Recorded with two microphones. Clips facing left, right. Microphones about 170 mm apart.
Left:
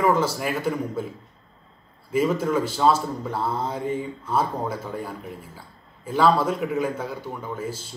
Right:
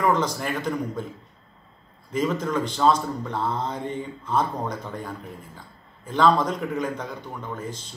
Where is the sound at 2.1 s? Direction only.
10° left (ahead or behind).